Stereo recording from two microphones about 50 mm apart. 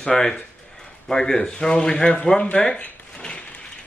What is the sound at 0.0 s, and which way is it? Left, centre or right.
Speech, centre.